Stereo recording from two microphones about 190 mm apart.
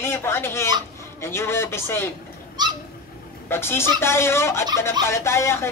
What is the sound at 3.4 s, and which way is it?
A man's voice, 10° left (ahead or behind).